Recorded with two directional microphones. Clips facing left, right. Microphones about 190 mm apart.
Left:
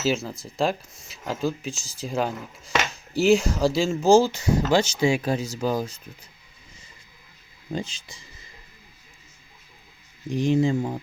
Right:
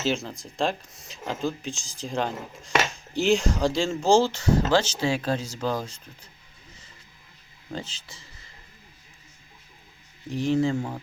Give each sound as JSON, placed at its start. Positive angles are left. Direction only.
{"t": 0.0, "sound": "speech", "side_deg": 5}
{"t": 7.7, "sound": "speech", "side_deg": 15}
{"t": 10.2, "sound": "speech", "side_deg": 15}